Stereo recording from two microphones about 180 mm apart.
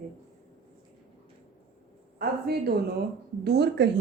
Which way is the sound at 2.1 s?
60° right (ahead or behind).